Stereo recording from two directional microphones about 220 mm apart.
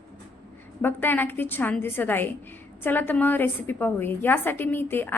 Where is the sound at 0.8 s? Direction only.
10° left (ahead or behind).